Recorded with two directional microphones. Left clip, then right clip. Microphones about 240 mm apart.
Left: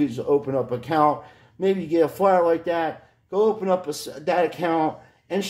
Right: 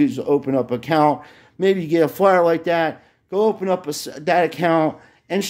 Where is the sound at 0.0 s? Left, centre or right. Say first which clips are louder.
Right 3 dB; right.